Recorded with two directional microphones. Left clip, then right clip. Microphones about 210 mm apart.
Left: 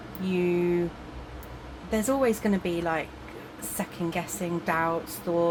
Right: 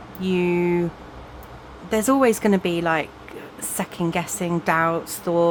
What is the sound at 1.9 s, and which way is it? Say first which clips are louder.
A woman's voice: right 7 dB; 45° right (ahead or behind).